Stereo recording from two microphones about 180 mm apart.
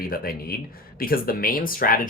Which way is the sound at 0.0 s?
55° left (ahead or behind).